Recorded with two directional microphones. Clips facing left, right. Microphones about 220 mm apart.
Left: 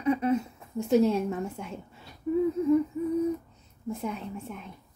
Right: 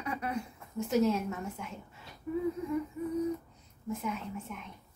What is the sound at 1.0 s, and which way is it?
Speech, 30° left (ahead or behind).